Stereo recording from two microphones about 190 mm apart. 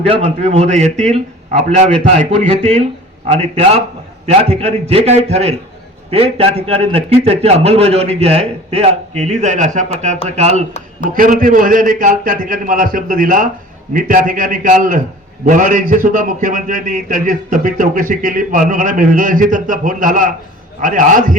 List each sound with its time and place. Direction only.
0.0 s a man's voice: 30° right (ahead or behind)
11.1 s a man's voice: 45° right (ahead or behind)